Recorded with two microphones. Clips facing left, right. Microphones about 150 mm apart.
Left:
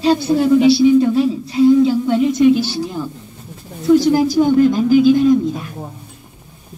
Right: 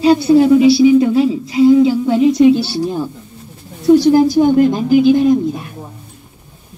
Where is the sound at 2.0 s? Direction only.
30° right (ahead or behind).